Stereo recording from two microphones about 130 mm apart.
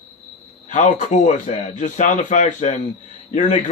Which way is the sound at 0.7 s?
70° left (ahead or behind).